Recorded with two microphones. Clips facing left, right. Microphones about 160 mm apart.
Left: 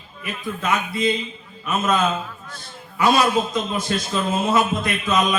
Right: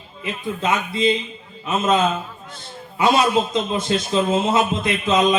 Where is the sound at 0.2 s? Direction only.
25° right (ahead or behind).